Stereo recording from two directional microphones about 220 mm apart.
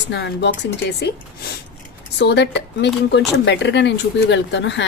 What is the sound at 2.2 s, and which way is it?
A woman's voice, 50° left (ahead or behind).